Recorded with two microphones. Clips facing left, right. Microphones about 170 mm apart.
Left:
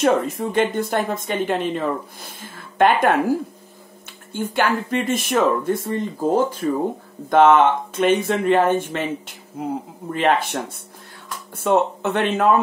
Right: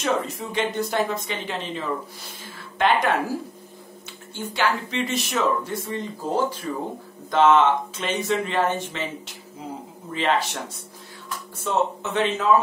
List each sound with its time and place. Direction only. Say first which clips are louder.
0.0 s speech: left 7 dB; 50° left (ahead or behind)
4.3 s speech: left 4 dB; 50° left (ahead or behind)